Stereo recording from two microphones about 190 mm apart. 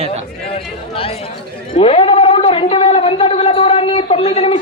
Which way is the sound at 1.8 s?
30° left (ahead or behind).